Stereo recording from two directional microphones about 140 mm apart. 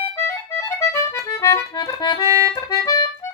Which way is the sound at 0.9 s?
20° left (ahead or behind).